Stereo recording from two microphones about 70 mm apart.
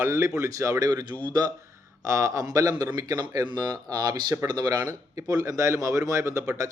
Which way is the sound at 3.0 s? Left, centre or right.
Right.